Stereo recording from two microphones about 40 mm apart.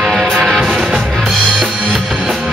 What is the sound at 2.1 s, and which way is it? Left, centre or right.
Music, centre.